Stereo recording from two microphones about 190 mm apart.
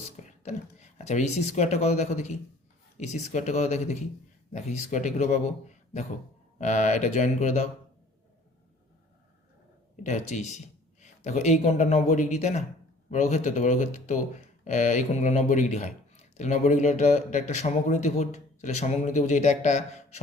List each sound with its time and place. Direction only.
0.0 s speech: 35° left (ahead or behind)
10.0 s speech: 40° left (ahead or behind)